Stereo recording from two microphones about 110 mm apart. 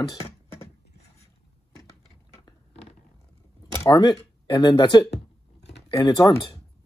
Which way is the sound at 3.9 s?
45° left (ahead or behind).